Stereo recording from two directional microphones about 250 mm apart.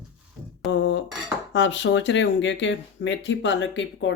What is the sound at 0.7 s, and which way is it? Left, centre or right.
Speech, left.